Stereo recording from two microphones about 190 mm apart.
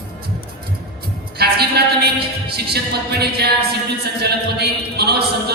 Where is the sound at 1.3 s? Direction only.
55° right (ahead or behind).